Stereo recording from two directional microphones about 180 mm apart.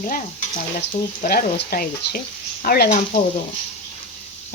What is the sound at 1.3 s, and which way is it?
Speech, 55° left (ahead or behind).